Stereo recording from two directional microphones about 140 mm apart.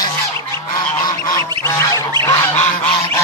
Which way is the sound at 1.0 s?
30° left (ahead or behind).